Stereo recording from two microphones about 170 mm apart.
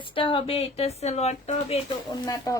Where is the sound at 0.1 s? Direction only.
30° left (ahead or behind).